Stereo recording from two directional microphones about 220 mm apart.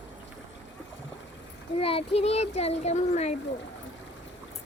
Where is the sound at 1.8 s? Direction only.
25° left (ahead or behind).